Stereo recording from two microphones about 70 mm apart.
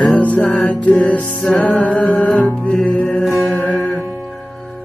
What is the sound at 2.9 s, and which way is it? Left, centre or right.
Music, left.